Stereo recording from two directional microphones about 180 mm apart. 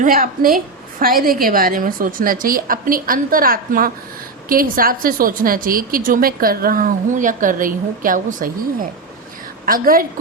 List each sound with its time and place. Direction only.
0.0 s a woman's voice: 50° right (ahead or behind)